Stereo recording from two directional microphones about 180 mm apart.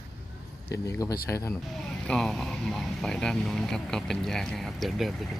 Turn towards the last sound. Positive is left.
turn(degrees=0)  # may be behind; listen again after turning